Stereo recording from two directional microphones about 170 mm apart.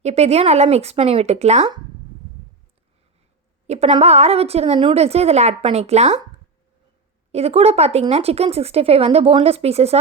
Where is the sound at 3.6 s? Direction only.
40° right (ahead or behind).